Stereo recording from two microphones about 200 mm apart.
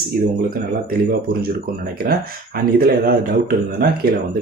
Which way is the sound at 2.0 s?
50° right (ahead or behind).